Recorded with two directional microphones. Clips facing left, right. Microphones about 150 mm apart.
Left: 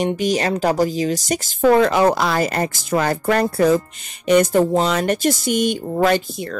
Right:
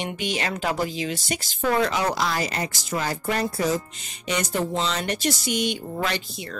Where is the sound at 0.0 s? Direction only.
40° left (ahead or behind).